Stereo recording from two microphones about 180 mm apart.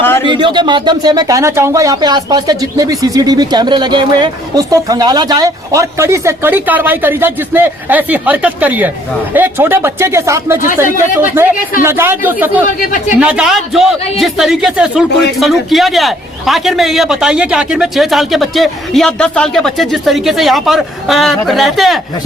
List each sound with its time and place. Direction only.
0.3 s speech: 25° right (ahead or behind); by 12.6 s 10° right (ahead or behind)
12.6 s speech: 45° left (ahead or behind)
13.1 s a man's voice: 5° right (ahead or behind)